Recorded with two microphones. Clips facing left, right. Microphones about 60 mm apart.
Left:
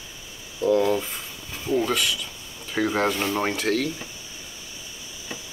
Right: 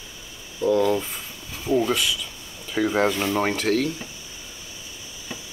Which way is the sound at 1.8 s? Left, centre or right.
Centre.